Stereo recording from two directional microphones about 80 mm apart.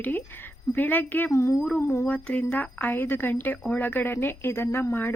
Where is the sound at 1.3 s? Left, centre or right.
Left.